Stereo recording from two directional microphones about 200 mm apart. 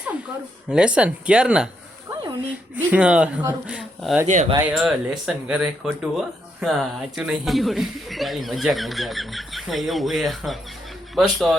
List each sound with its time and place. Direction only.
0.7 s speech: 5° right (ahead or behind)
4.3 s speech: 40° right (ahead or behind)
4.7 s speech: 5° right (ahead or behind)